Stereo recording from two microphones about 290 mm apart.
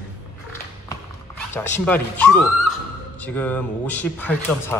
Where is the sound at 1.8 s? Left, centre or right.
Centre.